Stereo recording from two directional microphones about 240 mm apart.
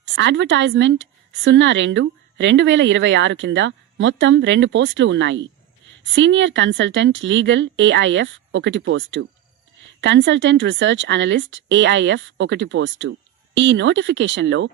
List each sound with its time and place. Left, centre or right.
0.0 s a woman's voice: right